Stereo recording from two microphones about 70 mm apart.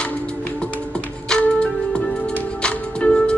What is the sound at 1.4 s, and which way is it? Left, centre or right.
Music, centre.